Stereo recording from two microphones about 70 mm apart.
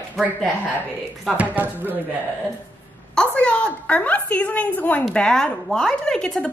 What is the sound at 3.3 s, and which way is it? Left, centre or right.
A woman's voice, centre.